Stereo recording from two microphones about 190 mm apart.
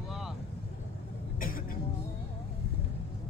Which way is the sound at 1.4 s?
45° left (ahead or behind).